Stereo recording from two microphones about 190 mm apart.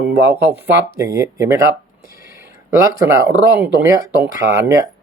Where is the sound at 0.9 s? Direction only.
15° right (ahead or behind).